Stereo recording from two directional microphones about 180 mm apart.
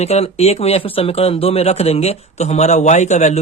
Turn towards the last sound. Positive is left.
turn(degrees=40)  # may be behind; listen again after turning